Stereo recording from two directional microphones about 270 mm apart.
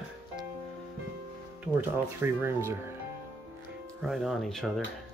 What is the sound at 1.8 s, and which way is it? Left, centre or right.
Speech, centre.